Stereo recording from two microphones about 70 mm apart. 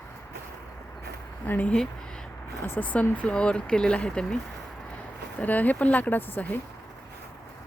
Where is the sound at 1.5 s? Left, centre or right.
Left.